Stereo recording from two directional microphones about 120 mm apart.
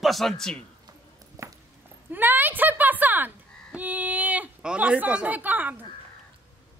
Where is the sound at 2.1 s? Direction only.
15° right (ahead or behind).